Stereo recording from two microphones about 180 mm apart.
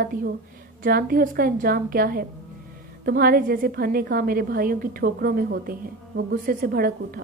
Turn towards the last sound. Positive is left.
turn(degrees=-55)  # may be behind; listen again after turning